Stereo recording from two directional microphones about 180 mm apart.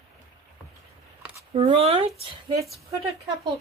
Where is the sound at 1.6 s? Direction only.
30° right (ahead or behind).